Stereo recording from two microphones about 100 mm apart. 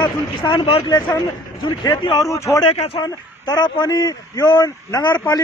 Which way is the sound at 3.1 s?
40° left (ahead or behind).